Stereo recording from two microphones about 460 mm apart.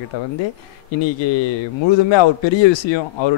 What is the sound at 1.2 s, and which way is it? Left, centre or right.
Speech, left.